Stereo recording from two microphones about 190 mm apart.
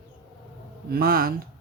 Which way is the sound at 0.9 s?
50° right (ahead or behind).